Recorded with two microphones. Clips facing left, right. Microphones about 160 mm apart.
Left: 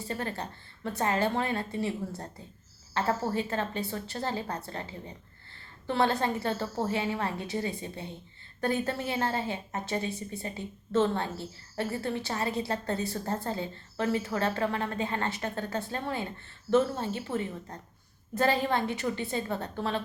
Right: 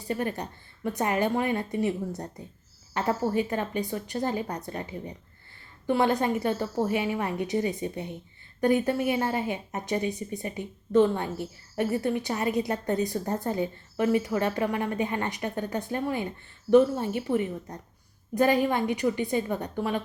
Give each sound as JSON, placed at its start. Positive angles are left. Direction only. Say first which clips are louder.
{"t": 0.1, "sound": "a woman's voice", "louder": "right 6 dB", "side_deg": -15}